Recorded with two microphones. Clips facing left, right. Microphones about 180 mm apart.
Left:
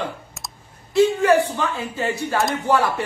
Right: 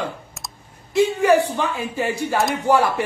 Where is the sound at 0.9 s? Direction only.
15° right (ahead or behind).